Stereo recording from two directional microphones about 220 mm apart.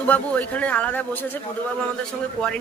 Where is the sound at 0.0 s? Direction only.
5° left (ahead or behind).